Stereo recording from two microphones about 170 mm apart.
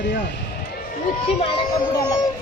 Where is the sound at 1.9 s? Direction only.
20° left (ahead or behind).